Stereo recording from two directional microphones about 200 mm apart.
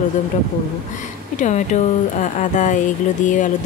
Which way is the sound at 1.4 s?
35° left (ahead or behind).